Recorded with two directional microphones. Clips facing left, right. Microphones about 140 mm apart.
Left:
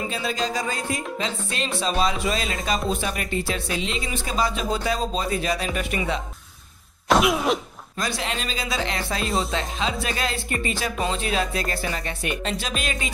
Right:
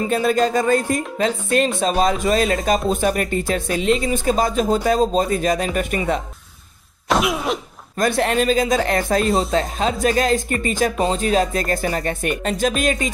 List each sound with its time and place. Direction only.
0.1 s speech: 50° right (ahead or behind)
7.1 s cough: centre (ahead or behind)
8.0 s speech: 55° right (ahead or behind)
9.2 s speech: centre (ahead or behind)
9.5 s speech: 45° right (ahead or behind)